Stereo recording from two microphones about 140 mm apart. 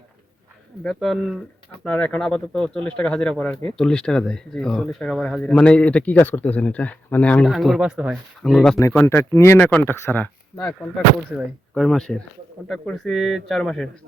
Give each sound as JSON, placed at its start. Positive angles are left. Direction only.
{"t": 0.9, "sound": "speech", "side_deg": 0}
{"t": 8.8, "sound": "speech", "side_deg": 20}
{"t": 11.7, "sound": "speech", "side_deg": 5}